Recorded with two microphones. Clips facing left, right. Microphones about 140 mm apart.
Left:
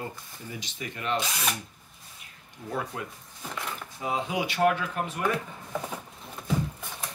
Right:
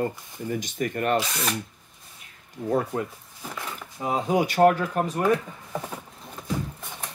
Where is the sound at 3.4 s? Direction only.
5° right (ahead or behind).